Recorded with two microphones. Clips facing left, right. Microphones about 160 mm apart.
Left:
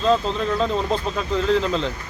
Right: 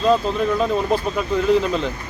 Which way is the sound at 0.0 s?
10° right (ahead or behind).